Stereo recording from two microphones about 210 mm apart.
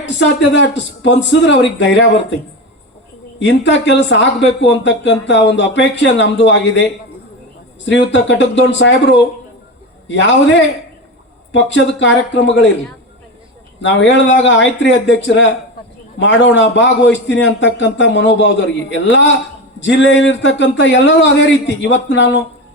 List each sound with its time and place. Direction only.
0.0 s speech: 60° left (ahead or behind)
3.3 s speech: 60° left (ahead or behind)
7.9 s speech: 60° left (ahead or behind)
10.1 s speech: 60° left (ahead or behind)
11.5 s speech: 60° left (ahead or behind)
13.8 s speech: 60° left (ahead or behind)